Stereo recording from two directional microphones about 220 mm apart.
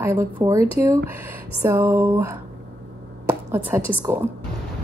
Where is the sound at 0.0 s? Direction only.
15° right (ahead or behind).